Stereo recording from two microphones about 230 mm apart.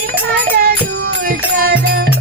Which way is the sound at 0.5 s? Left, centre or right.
Right.